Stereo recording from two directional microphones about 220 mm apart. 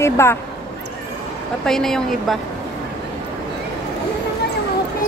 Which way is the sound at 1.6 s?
Centre (ahead or behind).